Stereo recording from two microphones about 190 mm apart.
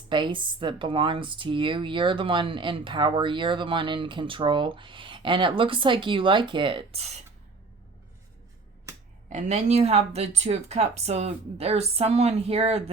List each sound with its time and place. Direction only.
0.1 s speech: 25° right (ahead or behind)
9.3 s speech: 35° right (ahead or behind)